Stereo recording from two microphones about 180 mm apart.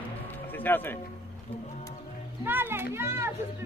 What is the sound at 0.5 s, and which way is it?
Speech, 10° left (ahead or behind).